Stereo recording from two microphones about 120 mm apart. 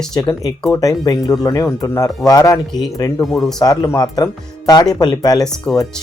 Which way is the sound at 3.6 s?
30° left (ahead or behind).